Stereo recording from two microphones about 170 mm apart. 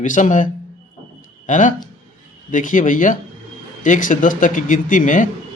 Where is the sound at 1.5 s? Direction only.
50° left (ahead or behind).